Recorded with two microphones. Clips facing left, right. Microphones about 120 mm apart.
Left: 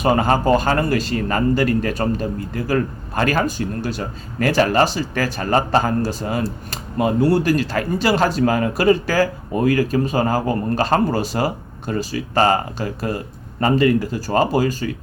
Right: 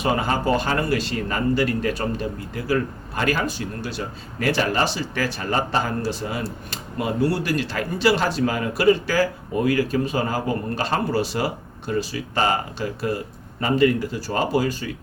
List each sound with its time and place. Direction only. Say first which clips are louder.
0.0 s speech: left 5 dB; 45° left (ahead or behind)